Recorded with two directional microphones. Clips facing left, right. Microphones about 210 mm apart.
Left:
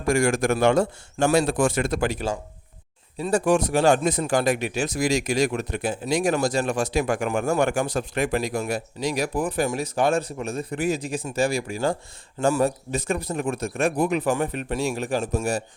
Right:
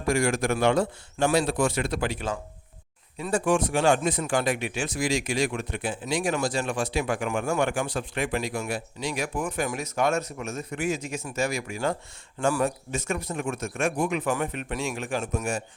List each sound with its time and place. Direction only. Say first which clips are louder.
0.1 s a man's voice: left 3 dB; 45° left (ahead or behind)